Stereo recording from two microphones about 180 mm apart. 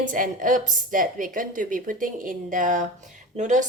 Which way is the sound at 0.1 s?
50° right (ahead or behind).